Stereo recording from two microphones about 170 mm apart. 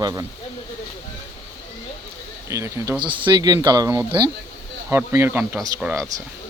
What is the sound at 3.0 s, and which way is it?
Speech, 30° right (ahead or behind).